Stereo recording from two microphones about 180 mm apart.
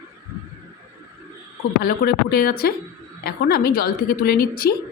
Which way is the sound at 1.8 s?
60° left (ahead or behind).